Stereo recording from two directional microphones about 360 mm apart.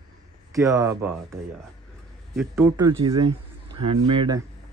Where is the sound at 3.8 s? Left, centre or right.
Right.